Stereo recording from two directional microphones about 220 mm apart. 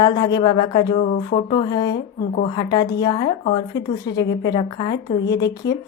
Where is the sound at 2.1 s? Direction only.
35° left (ahead or behind).